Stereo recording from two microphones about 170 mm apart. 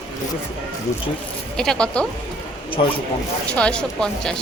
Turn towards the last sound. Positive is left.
turn(degrees=5)  # may be behind; listen again after turning